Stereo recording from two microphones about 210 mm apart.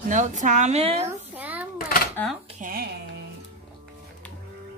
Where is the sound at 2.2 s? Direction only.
10° left (ahead or behind).